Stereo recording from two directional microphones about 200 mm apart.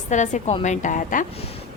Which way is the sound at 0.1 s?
35° left (ahead or behind).